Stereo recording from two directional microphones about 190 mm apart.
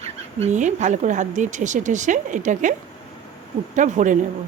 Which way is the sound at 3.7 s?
40° right (ahead or behind).